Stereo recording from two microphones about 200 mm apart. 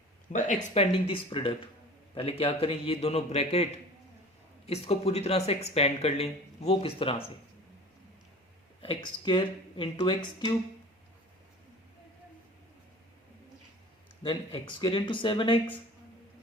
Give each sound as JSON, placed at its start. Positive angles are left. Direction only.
{"t": 0.3, "sound": "speech", "side_deg": 35}
{"t": 8.8, "sound": "speech", "side_deg": 25}
{"t": 14.2, "sound": "speech", "side_deg": 25}